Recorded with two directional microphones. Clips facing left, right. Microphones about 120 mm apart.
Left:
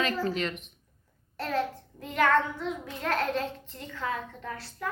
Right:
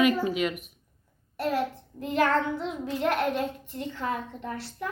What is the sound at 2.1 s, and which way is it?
A woman's voice, 25° right (ahead or behind).